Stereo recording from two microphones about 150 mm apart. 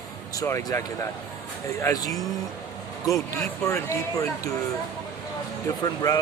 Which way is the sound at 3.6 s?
20° left (ahead or behind).